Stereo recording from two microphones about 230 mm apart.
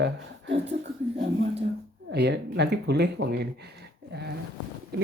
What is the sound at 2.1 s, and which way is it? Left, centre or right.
Speech, right.